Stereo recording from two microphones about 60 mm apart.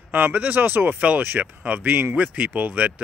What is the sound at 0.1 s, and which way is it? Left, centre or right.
Speech, right.